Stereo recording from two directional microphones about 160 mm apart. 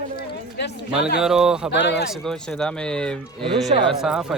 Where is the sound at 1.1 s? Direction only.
5° right (ahead or behind).